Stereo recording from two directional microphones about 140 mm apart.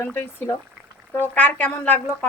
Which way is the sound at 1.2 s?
10° left (ahead or behind).